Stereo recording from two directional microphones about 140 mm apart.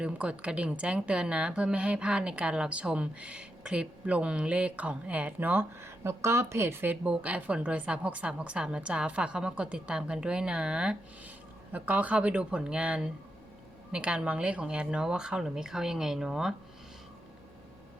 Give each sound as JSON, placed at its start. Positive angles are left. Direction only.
{"t": 0.0, "sound": "a woman's voice", "side_deg": -10}